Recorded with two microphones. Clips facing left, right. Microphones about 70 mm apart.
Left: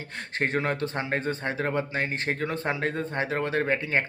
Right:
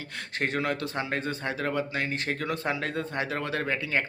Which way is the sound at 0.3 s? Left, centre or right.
Left.